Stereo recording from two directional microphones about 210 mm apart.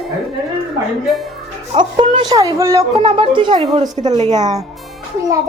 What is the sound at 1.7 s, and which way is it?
Speech, 25° right (ahead or behind).